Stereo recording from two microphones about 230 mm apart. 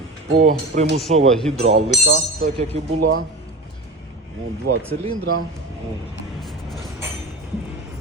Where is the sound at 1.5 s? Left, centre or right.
Right.